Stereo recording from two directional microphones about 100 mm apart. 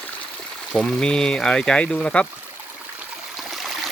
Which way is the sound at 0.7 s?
10° left (ahead or behind).